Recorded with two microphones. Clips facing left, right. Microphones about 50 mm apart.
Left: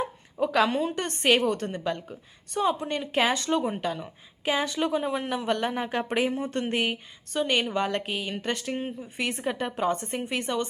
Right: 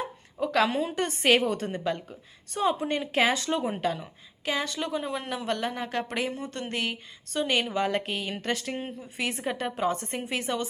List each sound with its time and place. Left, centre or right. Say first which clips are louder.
0.0 s a woman's voice: left 3 dB; centre
4.4 s speech: left 4 dB; centre
7.3 s a woman's voice: left 1 dB; centre